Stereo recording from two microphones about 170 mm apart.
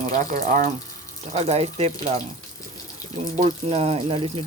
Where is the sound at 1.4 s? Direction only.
40° right (ahead or behind).